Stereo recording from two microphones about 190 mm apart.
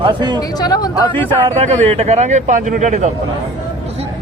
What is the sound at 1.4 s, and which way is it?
Speech, 35° right (ahead or behind).